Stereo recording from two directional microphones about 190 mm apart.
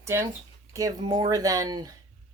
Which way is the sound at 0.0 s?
15° right (ahead or behind).